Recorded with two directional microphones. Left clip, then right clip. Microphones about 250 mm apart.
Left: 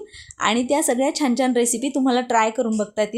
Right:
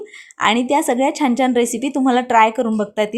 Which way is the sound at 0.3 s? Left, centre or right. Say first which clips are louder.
Right 4 dB; centre.